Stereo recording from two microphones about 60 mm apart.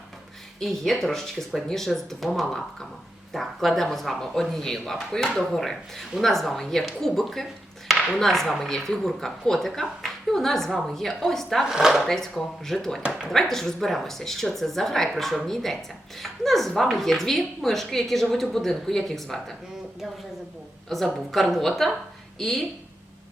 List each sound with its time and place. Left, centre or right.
0.6 s a woman's voice: centre
11.7 s speech: centre
12.0 s a woman's voice: centre
20.9 s a woman's voice: centre